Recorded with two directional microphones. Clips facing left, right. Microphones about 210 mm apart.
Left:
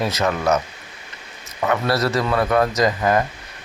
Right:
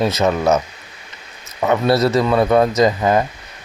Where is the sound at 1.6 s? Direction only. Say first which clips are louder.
Right 5 dB; 20° right (ahead or behind).